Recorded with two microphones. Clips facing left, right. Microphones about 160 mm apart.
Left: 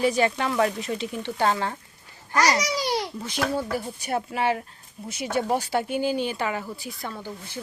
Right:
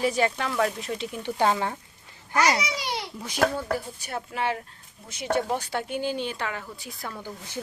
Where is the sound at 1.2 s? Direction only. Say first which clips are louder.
Right 1 dB; 15° right (ahead or behind).